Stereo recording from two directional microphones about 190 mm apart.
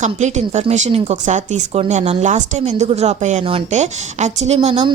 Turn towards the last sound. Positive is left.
turn(degrees=-35)  # may be behind; listen again after turning